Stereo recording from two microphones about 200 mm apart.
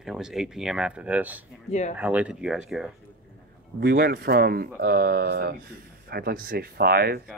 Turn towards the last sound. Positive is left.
turn(degrees=-50)  # may be behind; listen again after turning